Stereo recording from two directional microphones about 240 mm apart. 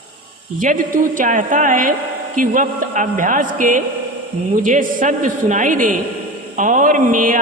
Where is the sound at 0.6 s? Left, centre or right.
Right.